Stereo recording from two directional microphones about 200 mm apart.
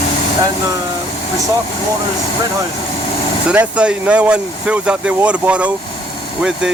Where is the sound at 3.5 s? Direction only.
5° right (ahead or behind).